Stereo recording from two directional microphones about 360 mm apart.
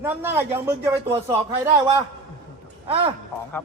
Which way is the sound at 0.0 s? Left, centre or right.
Centre.